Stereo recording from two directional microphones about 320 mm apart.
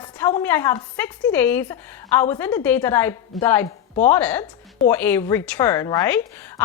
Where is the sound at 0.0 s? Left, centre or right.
Centre.